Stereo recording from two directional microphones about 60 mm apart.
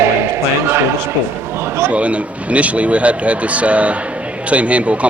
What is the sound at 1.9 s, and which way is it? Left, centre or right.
Speech, right.